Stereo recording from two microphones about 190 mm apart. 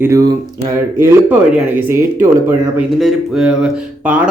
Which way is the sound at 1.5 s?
10° right (ahead or behind).